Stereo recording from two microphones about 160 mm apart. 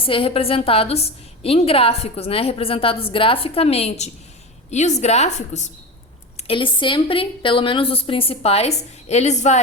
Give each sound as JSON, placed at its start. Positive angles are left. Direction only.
{"t": 0.0, "sound": "a woman's voice", "side_deg": 35}
{"t": 6.3, "sound": "a woman's voice", "side_deg": 35}